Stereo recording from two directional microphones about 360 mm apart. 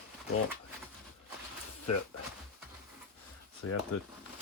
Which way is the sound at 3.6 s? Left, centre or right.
Left.